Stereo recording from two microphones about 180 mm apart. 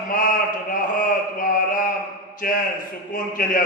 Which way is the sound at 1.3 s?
50° left (ahead or behind).